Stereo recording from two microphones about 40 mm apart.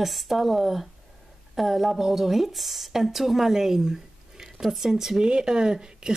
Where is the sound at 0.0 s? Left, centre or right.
Centre.